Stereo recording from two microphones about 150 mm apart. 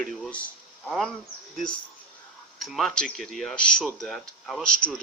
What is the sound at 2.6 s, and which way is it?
Speech, centre (ahead or behind).